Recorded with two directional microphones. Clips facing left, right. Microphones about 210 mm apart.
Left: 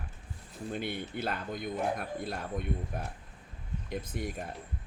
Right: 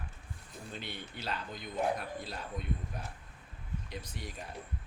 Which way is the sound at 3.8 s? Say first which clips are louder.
Left 12 dB; 50° left (ahead or behind).